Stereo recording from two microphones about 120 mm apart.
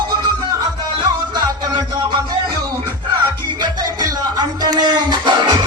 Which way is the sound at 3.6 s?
35° right (ahead or behind).